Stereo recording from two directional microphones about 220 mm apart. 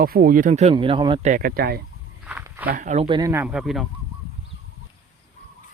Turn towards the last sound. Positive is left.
turn(degrees=0)  # may be behind; listen again after turning